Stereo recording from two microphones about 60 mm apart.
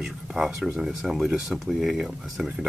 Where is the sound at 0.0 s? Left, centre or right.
Centre.